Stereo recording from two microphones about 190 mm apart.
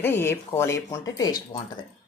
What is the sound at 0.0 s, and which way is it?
Speech, 10° left (ahead or behind).